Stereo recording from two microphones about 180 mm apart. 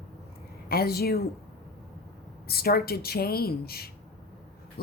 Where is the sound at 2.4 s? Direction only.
60° left (ahead or behind).